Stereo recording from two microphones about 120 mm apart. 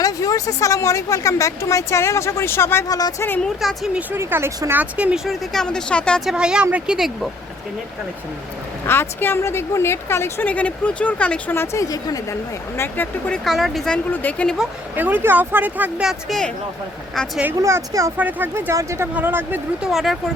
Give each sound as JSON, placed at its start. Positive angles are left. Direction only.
{"t": 0.0, "sound": "a woman's voice", "side_deg": 30}
{"t": 3.4, "sound": "speech", "side_deg": 5}
{"t": 3.9, "sound": "speech", "side_deg": -15}
{"t": 6.2, "sound": "speech", "side_deg": -5}
{"t": 8.9, "sound": "a woman's voice", "side_deg": 20}
{"t": 12.7, "sound": "speech", "side_deg": 15}
{"t": 14.9, "sound": "speech", "side_deg": -15}
{"t": 16.0, "sound": "speech", "side_deg": 5}
{"t": 17.6, "sound": "speech", "side_deg": -25}
{"t": 18.2, "sound": "speech", "side_deg": -15}
{"t": 19.8, "sound": "speech", "side_deg": 0}